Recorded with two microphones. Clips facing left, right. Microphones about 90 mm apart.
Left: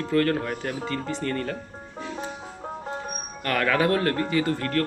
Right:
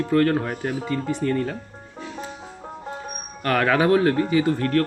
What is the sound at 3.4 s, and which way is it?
Speech, 25° right (ahead or behind).